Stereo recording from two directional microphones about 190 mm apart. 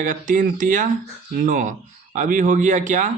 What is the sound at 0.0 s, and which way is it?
Speech, 45° right (ahead or behind).